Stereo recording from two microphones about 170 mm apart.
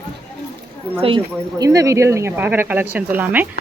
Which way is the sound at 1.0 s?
25° right (ahead or behind).